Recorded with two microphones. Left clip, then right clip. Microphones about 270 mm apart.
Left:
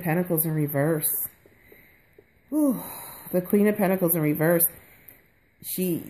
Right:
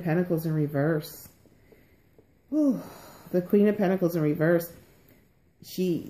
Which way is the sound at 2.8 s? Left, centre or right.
Left.